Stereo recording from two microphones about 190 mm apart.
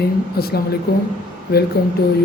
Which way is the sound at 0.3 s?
55° left (ahead or behind).